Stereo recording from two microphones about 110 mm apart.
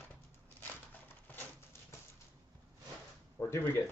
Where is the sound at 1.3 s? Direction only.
15° left (ahead or behind).